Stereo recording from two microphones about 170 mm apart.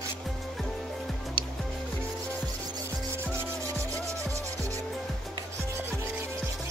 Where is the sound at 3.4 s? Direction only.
15° right (ahead or behind).